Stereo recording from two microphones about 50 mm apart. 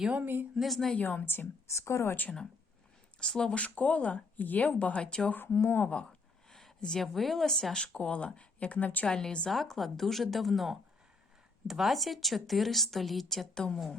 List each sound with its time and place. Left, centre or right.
0.5 s speech: centre
0.9 s speech: left
1.2 s a woman's voice: left
1.6 s speech: left
3.2 s speech: centre
5.3 s speech: left
5.5 s speech: left
6.5 s a sound: centre
6.7 s a woman's voice: centre
7.0 s speech: centre
7.8 s speech: left
9.0 s a woman's voice: centre
9.5 s speech: centre